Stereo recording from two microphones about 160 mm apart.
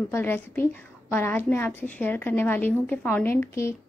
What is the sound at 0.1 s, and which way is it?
A woman's voice, 10° left (ahead or behind).